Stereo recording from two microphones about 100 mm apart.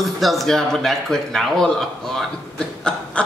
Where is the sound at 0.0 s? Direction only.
Centre (ahead or behind).